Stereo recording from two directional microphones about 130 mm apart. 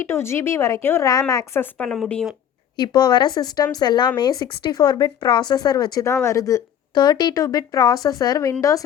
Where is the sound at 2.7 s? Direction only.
35° left (ahead or behind).